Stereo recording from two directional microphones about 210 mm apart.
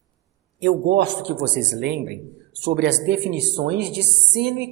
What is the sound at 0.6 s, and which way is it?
A woman's voice, 55° right (ahead or behind).